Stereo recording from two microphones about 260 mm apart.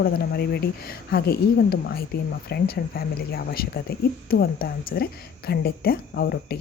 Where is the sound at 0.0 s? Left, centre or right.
Left.